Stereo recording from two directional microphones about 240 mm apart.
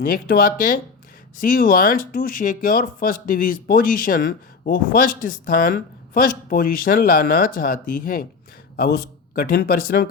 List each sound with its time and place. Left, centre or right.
0.0 s speech: left